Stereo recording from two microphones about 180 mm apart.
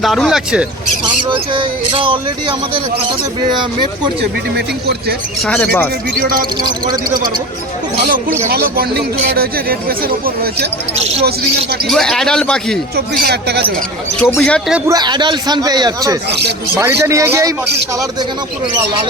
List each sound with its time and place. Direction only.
0.0 s a man's voice: centre (ahead or behind)
1.0 s a man's voice: 30° right (ahead or behind)
4.2 s speech: 65° right (ahead or behind)
5.5 s speech: 10° left (ahead or behind)
6.1 s a man's voice: 55° right (ahead or behind)
6.6 s a man's voice: 20° right (ahead or behind)
8.4 s speech: 55° right (ahead or behind)
10.9 s speech: 35° right (ahead or behind)
11.9 s a man's voice: centre (ahead or behind)
13.2 s speech: 60° right (ahead or behind)
14.2 s a man's voice: 5° left (ahead or behind)
14.8 s a man's voice: 25° right (ahead or behind)